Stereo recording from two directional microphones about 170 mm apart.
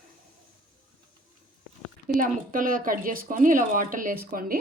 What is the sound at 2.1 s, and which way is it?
Speech, 55° right (ahead or behind).